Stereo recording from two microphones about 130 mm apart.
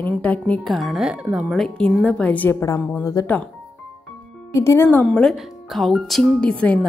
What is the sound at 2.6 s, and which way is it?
Speech, 25° left (ahead or behind).